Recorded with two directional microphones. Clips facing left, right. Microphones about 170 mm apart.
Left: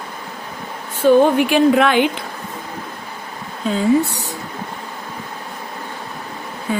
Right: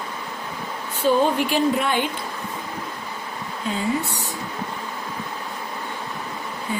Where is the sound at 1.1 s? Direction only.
60° left (ahead or behind); by 2.1 s 85° left.